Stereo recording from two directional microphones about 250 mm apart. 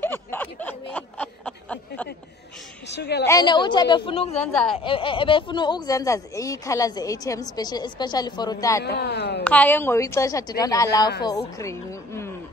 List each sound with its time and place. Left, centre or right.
0.0 s snicker: centre
2.9 s a woman's voice: left
3.3 s speech: centre
4.4 s a woman's voice: centre
4.7 s speech: left
8.8 s speech: left
9.4 s a woman's voice: centre